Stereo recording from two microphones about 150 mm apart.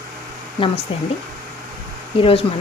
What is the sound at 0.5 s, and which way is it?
Speech, 35° left (ahead or behind).